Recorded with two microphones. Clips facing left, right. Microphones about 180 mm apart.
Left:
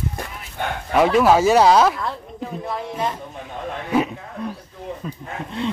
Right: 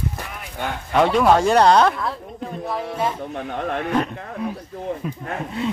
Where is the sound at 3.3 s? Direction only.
70° right (ahead or behind).